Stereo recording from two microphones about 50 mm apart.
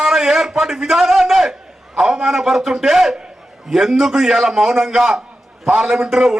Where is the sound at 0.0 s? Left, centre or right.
Centre.